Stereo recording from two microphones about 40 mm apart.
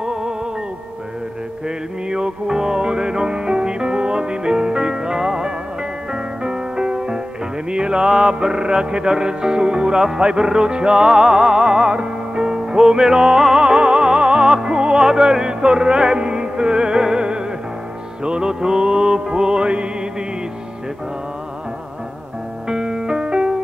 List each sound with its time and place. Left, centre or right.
0.0 s music: centre
2.0 s music: centre
22.7 s music: centre